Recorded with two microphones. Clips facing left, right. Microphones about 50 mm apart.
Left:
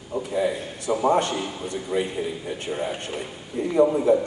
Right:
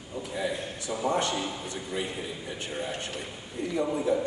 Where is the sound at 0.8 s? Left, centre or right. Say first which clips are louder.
Left 7 dB; left.